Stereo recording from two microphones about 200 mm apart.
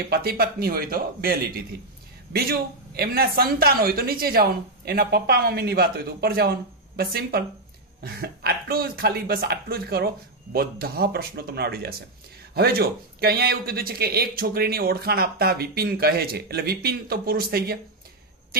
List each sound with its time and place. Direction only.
0.1 s speech: 50° right (ahead or behind)